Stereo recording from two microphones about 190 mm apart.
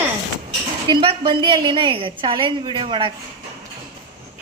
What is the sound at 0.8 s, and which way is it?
A woman's voice, 25° right (ahead or behind).